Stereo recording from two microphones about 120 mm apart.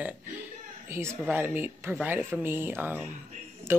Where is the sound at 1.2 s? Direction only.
15° right (ahead or behind).